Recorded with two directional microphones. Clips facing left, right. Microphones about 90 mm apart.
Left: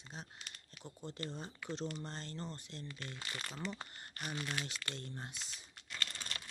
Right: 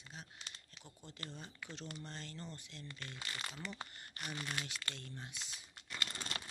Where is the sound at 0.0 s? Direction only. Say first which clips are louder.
Left 3 dB; 30° left (ahead or behind).